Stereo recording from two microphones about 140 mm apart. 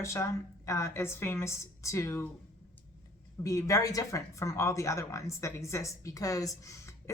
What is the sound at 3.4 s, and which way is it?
Speech, 20° left (ahead or behind).